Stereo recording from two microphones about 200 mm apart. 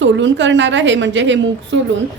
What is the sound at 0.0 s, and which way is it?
A woman's voice, 65° right (ahead or behind).